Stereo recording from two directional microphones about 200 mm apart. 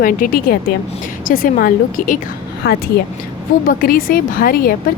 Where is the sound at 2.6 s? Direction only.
55° left (ahead or behind).